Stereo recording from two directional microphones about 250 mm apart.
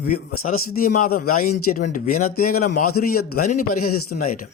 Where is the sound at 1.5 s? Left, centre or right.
Left.